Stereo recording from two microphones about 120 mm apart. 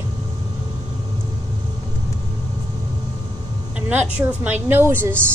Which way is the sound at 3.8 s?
15° right (ahead or behind).